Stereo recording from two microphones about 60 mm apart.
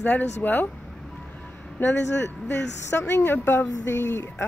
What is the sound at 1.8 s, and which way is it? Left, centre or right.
Speech, left.